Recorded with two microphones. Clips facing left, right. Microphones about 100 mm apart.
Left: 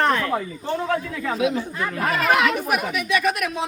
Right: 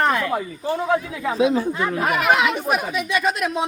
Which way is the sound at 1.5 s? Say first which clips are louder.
Right 4 dB; 15° right (ahead or behind).